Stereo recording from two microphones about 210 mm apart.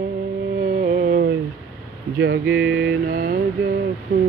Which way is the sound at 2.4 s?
5° right (ahead or behind).